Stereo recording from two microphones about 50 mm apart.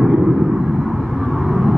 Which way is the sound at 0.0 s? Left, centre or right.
Centre.